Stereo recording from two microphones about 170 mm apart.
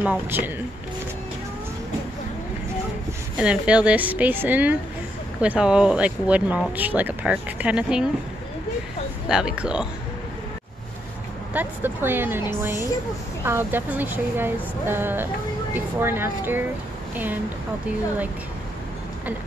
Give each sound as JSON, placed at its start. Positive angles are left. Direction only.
{"t": 0.0, "sound": "speech", "side_deg": -10}
{"t": 3.3, "sound": "speech", "side_deg": -5}
{"t": 9.3, "sound": "speech", "side_deg": -5}
{"t": 11.5, "sound": "speech", "side_deg": -10}